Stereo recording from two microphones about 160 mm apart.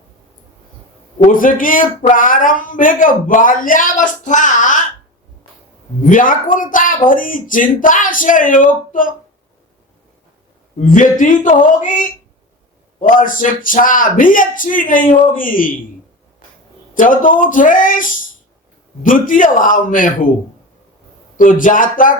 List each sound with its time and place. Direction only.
1.2 s speech: 60° left (ahead or behind)
6.0 s speech: 55° left (ahead or behind)
10.8 s speech: 55° left (ahead or behind)
16.9 s speech: 55° left (ahead or behind)
21.3 s speech: 55° left (ahead or behind)